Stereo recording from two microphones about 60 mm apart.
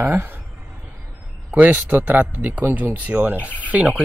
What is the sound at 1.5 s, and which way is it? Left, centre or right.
Speech, right.